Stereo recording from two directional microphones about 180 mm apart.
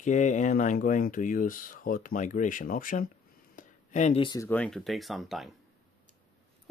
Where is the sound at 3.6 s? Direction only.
45° left (ahead or behind).